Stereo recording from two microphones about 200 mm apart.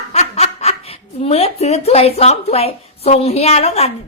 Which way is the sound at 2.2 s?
30° left (ahead or behind).